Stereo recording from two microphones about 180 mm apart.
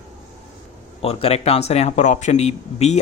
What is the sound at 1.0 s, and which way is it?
Speech, 35° left (ahead or behind).